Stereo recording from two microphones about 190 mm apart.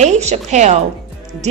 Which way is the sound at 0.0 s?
35° right (ahead or behind).